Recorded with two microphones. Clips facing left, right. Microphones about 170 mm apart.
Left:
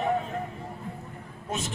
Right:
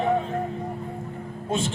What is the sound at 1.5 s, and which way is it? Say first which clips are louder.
Speech: right 7 dB; 30° right (ahead or behind).